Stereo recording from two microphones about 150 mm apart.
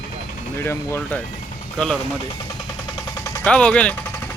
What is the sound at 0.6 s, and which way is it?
Speech, 15° left (ahead or behind).